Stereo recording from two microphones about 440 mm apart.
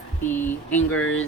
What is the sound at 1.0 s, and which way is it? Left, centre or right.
Speech, left.